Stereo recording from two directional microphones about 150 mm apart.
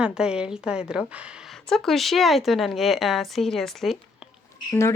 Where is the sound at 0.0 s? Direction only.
5° right (ahead or behind).